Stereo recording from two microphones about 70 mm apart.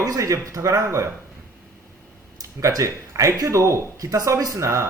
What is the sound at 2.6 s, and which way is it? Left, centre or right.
Speech, right.